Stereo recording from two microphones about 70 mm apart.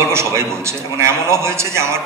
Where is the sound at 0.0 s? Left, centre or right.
Right.